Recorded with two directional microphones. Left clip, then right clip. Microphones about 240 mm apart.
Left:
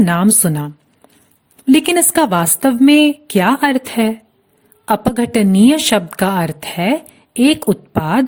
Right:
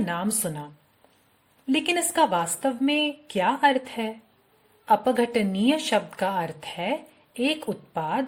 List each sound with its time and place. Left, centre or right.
0.0 s a woman's voice: left